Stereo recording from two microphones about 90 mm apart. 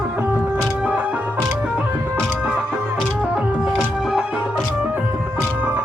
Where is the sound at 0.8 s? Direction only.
15° right (ahead or behind).